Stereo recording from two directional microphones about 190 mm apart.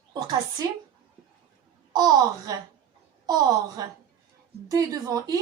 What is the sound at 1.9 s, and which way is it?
A woman's voice, 20° right (ahead or behind).